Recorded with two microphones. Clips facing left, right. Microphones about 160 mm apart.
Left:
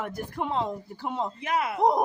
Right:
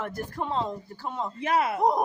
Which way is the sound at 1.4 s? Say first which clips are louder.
Right 5 dB; 30° right (ahead or behind).